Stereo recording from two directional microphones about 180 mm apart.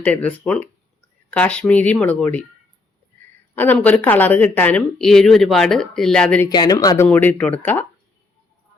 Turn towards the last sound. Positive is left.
turn(degrees=10)  # may be behind; listen again after turning